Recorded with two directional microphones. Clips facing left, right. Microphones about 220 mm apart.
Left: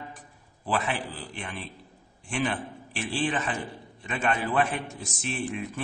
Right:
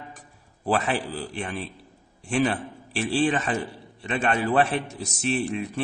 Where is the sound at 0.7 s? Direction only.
40° right (ahead or behind).